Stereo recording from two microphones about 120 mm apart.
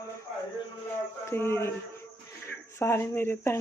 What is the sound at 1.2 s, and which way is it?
Speech, 20° left (ahead or behind).